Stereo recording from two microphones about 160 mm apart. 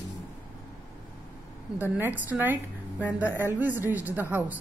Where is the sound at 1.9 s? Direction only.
10° right (ahead or behind).